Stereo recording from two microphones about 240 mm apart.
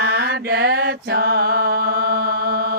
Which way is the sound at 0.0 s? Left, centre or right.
Right.